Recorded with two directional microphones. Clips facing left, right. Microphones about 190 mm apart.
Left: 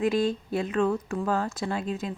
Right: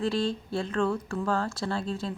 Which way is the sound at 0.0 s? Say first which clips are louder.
Left 3 dB; 20° left (ahead or behind).